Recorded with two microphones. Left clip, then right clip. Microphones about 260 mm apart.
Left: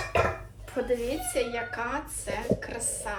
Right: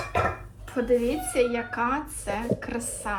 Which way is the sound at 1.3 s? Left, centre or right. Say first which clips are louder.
Right 5 dB; right.